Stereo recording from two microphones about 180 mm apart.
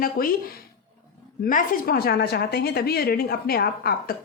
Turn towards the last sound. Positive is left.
turn(degrees=55)  # may be behind; listen again after turning